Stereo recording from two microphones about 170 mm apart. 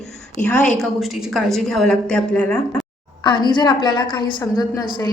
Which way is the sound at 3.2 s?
25° left (ahead or behind).